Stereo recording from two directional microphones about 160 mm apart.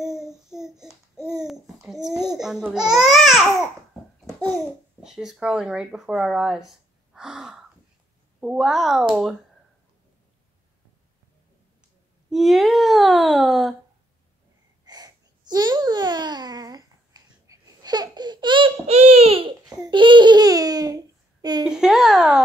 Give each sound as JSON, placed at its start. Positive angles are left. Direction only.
{"t": 0.0, "sound": "child singing", "side_deg": -5}
{"t": 1.4, "sound": "babbling", "side_deg": 0}
{"t": 5.0, "sound": "speech", "side_deg": 0}
{"t": 6.7, "sound": "gasp", "side_deg": -5}
{"t": 8.4, "sound": "speech", "side_deg": -5}
{"t": 12.3, "sound": "speech", "side_deg": 0}
{"t": 14.9, "sound": "babbling", "side_deg": -25}
{"t": 19.7, "sound": "speech", "side_deg": -30}
{"t": 21.6, "sound": "speech", "side_deg": -5}